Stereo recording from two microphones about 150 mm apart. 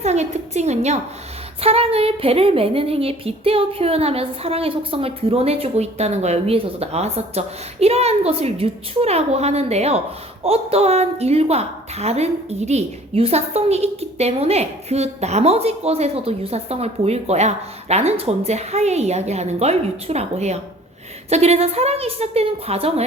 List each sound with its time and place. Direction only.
0.0 s a woman's voice: 45° right (ahead or behind)